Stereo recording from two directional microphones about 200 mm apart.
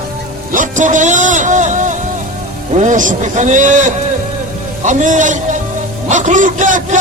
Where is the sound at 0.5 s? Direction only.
40° right (ahead or behind).